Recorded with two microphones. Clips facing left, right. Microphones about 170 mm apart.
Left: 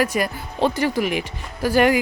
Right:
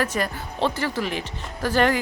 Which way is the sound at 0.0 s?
10° left (ahead or behind).